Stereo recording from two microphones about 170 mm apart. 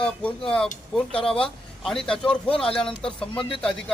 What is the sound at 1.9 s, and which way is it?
A man's voice, 5° left (ahead or behind).